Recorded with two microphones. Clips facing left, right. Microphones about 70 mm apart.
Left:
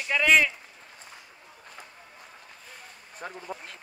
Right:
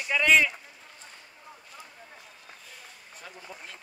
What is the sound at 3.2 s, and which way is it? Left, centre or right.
Speech, left.